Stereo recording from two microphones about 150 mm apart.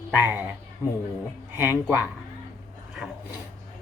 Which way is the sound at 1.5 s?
15° right (ahead or behind).